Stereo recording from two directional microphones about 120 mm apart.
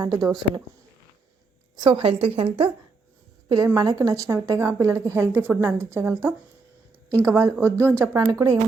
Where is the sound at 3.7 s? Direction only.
30° right (ahead or behind).